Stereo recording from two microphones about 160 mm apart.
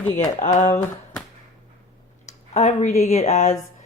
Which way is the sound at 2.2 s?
45° left (ahead or behind).